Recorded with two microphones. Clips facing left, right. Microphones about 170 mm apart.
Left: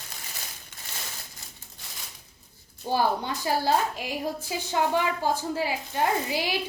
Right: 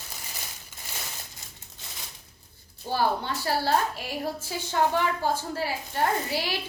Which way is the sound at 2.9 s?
15° left (ahead or behind).